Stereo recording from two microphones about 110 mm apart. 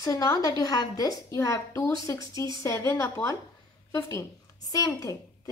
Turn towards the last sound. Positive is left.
turn(degrees=30)  # may be behind; listen again after turning